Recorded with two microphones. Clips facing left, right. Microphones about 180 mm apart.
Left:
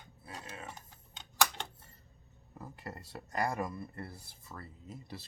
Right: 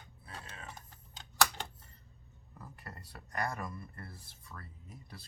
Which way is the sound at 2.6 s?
25° left (ahead or behind).